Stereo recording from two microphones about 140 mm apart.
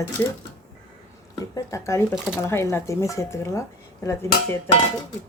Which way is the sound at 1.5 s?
20° left (ahead or behind).